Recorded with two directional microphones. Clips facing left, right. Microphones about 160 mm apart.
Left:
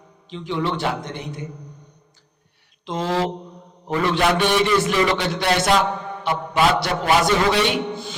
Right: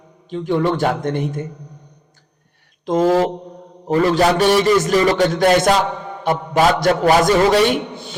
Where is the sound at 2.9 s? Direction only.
45° right (ahead or behind).